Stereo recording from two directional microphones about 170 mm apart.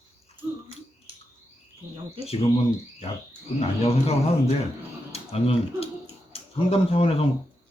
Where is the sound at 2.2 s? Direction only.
35° left (ahead or behind).